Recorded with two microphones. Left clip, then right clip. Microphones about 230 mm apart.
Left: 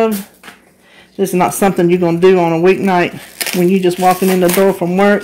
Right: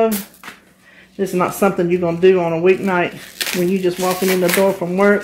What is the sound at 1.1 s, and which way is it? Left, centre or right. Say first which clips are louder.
Speech: left 5 dB; left.